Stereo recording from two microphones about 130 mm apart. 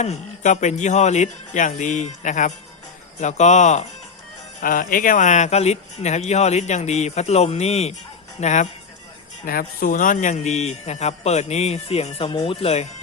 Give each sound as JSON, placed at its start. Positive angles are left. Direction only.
{"t": 0.0, "sound": "speech", "side_deg": 60}
{"t": 4.6, "sound": "speech", "side_deg": 90}
{"t": 9.5, "sound": "speech", "side_deg": 90}